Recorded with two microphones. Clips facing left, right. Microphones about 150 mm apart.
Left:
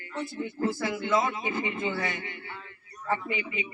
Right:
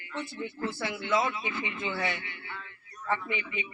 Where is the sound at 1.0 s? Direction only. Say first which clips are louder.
Even; 45° left (ahead or behind).